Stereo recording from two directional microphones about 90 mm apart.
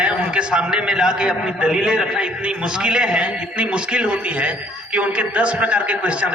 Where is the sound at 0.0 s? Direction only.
10° right (ahead or behind).